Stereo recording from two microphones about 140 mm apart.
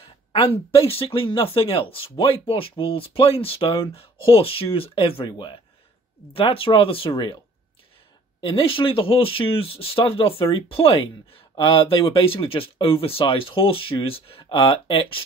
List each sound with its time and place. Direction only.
0.0 s speech: 40° left (ahead or behind)
6.3 s speech: 40° left (ahead or behind)
8.4 s speech: 35° left (ahead or behind)